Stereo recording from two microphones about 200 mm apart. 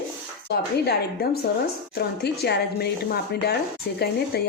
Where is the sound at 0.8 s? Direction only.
50° left (ahead or behind).